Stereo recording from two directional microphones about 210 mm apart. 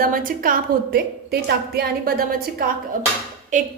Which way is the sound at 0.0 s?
40° right (ahead or behind).